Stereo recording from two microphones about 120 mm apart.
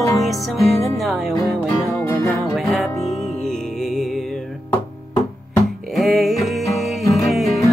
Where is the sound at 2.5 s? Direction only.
Centre (ahead or behind).